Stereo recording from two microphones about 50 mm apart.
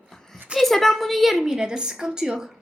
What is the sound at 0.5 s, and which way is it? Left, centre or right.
A woman's voice, centre.